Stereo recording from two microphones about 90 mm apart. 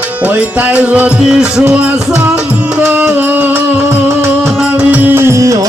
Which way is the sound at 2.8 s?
20° right (ahead or behind).